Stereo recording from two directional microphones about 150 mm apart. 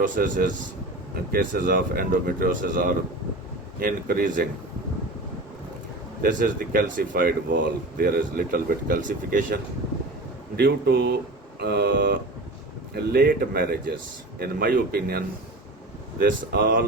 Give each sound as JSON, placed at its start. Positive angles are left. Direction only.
{"t": 0.0, "sound": "speech", "side_deg": -65}
{"t": 1.1, "sound": "speech", "side_deg": -90}
{"t": 6.2, "sound": "speech", "side_deg": -70}
{"t": 10.6, "sound": "speech", "side_deg": -90}